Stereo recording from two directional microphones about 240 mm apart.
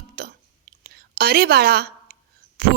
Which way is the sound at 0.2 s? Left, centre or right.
Right.